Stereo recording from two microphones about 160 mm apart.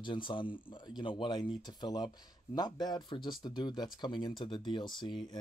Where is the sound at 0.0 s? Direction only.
30° left (ahead or behind).